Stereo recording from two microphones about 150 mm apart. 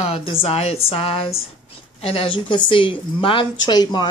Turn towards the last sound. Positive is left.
turn(degrees=30)  # may be behind; listen again after turning